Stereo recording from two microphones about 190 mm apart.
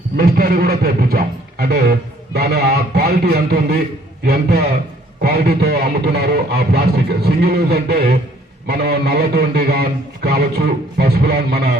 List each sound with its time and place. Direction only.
0.2 s a man's voice: 50° right (ahead or behind)